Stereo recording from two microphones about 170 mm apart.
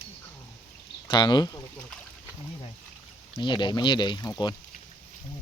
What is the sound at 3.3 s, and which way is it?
Speech, 25° left (ahead or behind).